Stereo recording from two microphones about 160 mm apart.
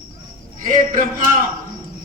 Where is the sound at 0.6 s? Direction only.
55° right (ahead or behind).